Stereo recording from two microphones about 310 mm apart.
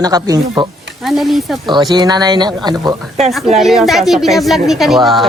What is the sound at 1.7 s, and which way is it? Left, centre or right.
Speech, centre.